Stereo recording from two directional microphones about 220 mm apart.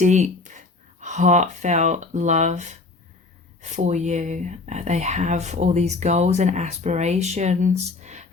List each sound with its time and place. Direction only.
0.0 s speech: 35° right (ahead or behind)